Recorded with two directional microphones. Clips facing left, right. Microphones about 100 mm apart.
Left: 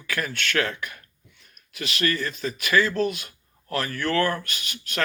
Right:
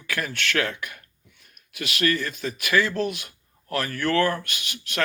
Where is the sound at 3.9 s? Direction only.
40° right (ahead or behind).